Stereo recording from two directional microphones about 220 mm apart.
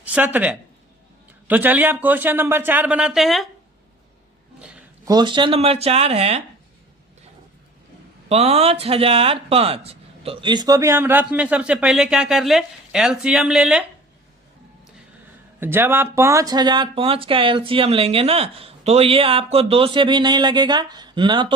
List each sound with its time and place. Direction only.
0.0 s speech: 10° right (ahead or behind)
5.0 s speech: 20° right (ahead or behind)
8.3 s speech: 25° right (ahead or behind); by 13.8 s 5° right (ahead or behind)
15.6 s speech: 10° right (ahead or behind)